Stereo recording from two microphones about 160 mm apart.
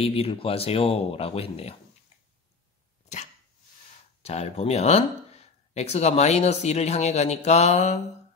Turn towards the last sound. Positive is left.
turn(degrees=45)  # may be behind; listen again after turning